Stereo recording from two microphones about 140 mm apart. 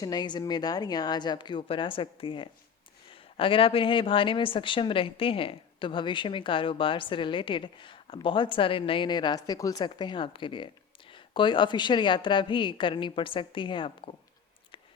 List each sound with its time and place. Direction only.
0.0 s speech: 30° left (ahead or behind)